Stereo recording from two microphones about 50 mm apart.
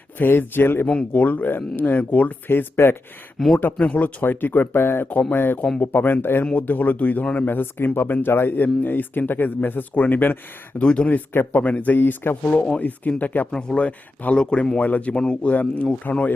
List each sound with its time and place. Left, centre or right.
0.2 s speech: left
1.1 s speech: left
2.8 s speech: left
3.3 s speech: centre
3.8 s speech: left
5.3 s speech: left
6.4 s speech: left
7.3 s speech: left
10.8 s speech: left
12.5 s speech: left
13.5 s speech: centre
15.1 s a man's voice: centre